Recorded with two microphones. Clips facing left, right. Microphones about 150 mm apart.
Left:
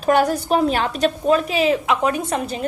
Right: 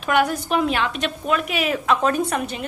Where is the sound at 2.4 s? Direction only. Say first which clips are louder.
Left 4 dB; 35° left (ahead or behind).